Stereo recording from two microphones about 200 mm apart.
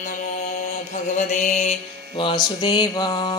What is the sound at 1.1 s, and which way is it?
Mantra, 35° left (ahead or behind).